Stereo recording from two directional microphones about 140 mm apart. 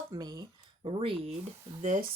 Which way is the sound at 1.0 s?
40° right (ahead or behind).